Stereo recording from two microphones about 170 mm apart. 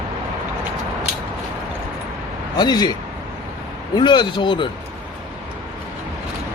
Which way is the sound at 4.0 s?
25° left (ahead or behind).